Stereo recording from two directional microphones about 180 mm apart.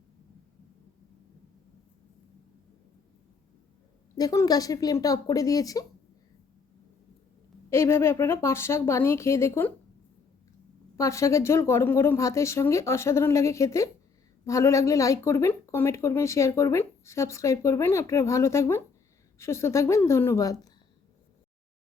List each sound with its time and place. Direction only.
4.2 s speech: 20° left (ahead or behind)
7.7 s speech: 15° left (ahead or behind)
10.9 s speech: 15° left (ahead or behind)